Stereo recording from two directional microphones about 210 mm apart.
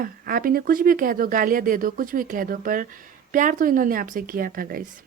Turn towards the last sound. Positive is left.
turn(degrees=-45)  # may be behind; listen again after turning